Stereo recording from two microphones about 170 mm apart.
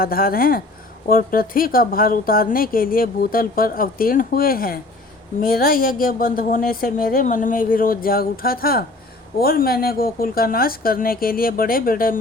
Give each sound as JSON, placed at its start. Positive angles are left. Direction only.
{"t": 0.0, "sound": "speech", "side_deg": 60}